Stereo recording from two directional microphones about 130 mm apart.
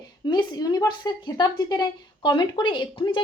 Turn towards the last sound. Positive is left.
turn(degrees=35)  # may be behind; listen again after turning